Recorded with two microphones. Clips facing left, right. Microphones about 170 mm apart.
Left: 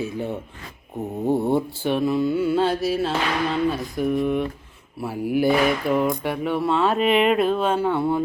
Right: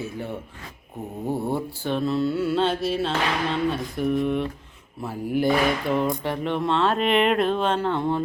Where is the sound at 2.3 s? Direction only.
5° right (ahead or behind).